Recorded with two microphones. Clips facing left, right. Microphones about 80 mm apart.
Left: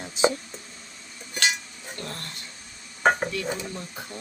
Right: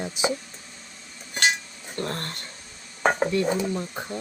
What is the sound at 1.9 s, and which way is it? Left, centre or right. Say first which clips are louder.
Speech: right 8 dB; right.